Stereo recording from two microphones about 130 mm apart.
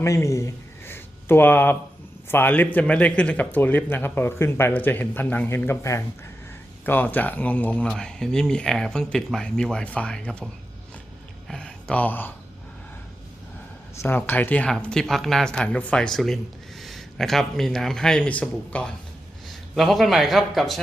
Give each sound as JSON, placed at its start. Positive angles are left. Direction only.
{"t": 0.0, "sound": "speech", "side_deg": 20}
{"t": 11.4, "sound": "a sound", "side_deg": 5}
{"t": 14.0, "sound": "a man's voice", "side_deg": 15}